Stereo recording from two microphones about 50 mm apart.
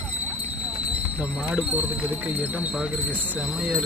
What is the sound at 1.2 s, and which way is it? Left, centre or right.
Speech, right.